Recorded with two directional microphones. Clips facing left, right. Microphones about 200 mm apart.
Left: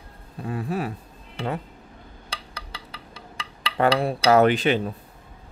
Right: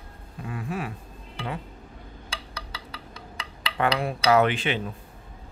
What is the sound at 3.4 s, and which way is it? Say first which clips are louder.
A man's voice: left 4 dB; 35° left (ahead or behind).